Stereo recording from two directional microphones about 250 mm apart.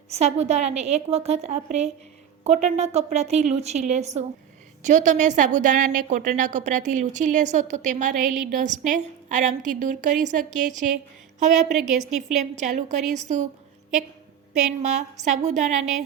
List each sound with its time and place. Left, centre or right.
0.1 s a woman's voice: right
14.8 s a woman's voice: right